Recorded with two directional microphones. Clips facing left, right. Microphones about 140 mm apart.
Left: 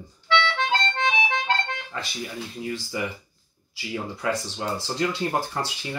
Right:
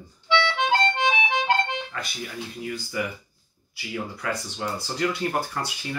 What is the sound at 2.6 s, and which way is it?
Speech, 25° left (ahead or behind).